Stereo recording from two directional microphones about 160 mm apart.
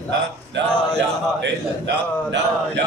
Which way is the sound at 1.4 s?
90° right.